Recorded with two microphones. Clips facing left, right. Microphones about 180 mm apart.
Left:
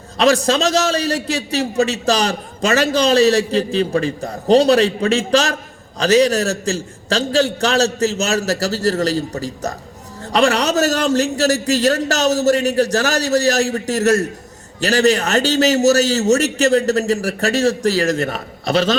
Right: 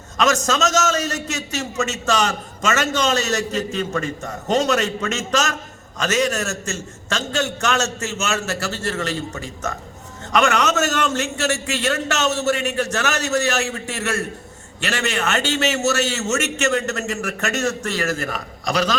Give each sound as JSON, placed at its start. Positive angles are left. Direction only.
{"t": 0.2, "sound": "a man's voice", "side_deg": 35}